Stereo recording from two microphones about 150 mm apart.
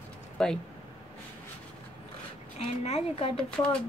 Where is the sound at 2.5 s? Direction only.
45° left (ahead or behind).